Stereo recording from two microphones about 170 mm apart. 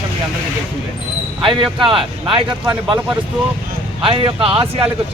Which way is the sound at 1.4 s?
30° right (ahead or behind).